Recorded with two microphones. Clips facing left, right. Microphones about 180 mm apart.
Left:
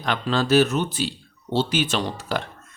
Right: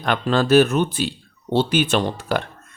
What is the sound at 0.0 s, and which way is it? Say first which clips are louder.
Speech: right 4 dB; 55° right (ahead or behind).